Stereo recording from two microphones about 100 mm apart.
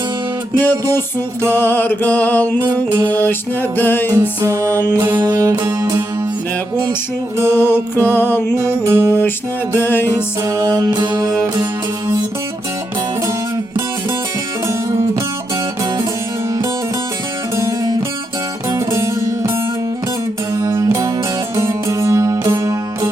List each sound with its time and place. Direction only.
0.6 s mantra: 20° left (ahead or behind)
4.4 s music: 30° right (ahead or behind)
4.6 s mantra: 20° left (ahead or behind)
4.9 s music: 20° right (ahead or behind)
5.2 s music: 40° right (ahead or behind)
7.5 s mantra: 20° left (ahead or behind)
8.5 s music: 25° right (ahead or behind)
9.7 s mantra: 25° left (ahead or behind)
10.4 s music: 30° right (ahead or behind)
14.7 s music: 25° right (ahead or behind)
17.6 s music: 30° right (ahead or behind)
20.6 s music: 30° right (ahead or behind)